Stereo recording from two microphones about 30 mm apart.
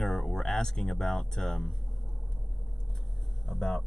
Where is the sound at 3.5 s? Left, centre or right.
Centre.